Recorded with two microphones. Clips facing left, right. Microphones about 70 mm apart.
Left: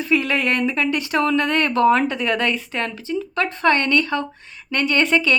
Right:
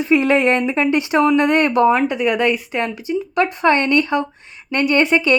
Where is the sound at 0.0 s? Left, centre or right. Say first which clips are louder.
Right 5 dB; right.